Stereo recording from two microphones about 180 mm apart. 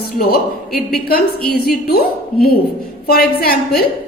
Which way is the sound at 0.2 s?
55° left (ahead or behind).